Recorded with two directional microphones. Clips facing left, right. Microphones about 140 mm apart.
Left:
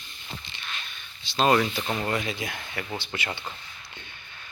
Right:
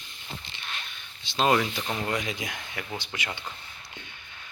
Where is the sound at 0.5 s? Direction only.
20° right (ahead or behind).